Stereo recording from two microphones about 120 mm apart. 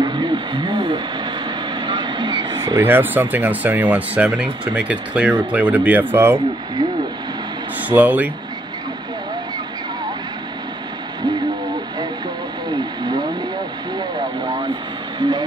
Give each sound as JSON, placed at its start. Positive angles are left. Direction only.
{"t": 0.0, "sound": "a sound", "side_deg": -40}
{"t": 1.8, "sound": "vehicle", "side_deg": -40}
{"t": 2.8, "sound": "speech", "side_deg": -15}
{"t": 7.9, "sound": "speech", "side_deg": -15}
{"t": 15.1, "sound": "vehicle", "side_deg": -40}